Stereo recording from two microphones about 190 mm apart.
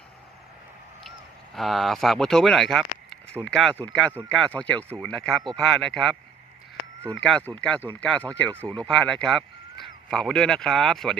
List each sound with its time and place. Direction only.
1.5 s speech: centre (ahead or behind)
7.2 s speech: 5° left (ahead or behind)